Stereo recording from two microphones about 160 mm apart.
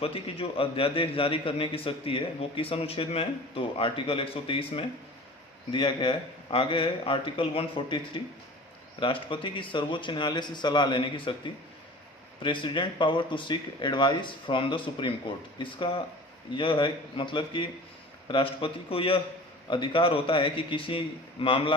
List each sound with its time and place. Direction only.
0.0 s a man's voice: 35° left (ahead or behind)